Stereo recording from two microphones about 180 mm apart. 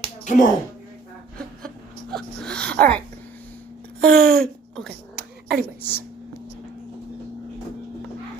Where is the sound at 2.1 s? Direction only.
5° left (ahead or behind).